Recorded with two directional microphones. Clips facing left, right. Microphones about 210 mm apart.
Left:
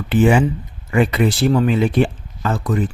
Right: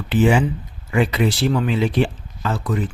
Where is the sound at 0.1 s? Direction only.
55° left (ahead or behind).